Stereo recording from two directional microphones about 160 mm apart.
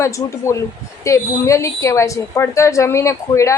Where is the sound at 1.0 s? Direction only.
20° left (ahead or behind).